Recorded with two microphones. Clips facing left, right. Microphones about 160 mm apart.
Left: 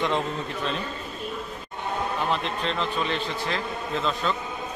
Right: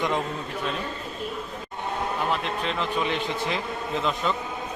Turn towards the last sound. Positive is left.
turn(degrees=-15)  # may be behind; listen again after turning